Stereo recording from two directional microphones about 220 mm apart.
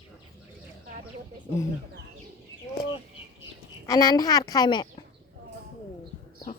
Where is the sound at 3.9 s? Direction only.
15° left (ahead or behind).